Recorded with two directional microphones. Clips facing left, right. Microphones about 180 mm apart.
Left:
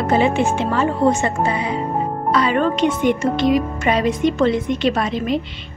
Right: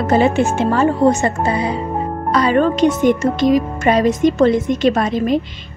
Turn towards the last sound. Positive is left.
turn(degrees=-45)  # may be behind; listen again after turning